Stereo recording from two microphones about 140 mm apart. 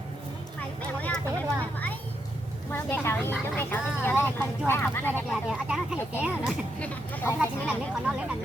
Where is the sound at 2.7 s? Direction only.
15° left (ahead or behind).